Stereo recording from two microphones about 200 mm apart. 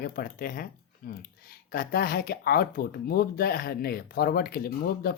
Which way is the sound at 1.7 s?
50° left (ahead or behind).